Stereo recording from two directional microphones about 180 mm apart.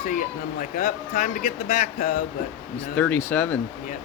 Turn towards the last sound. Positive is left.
turn(degrees=10)  # may be behind; listen again after turning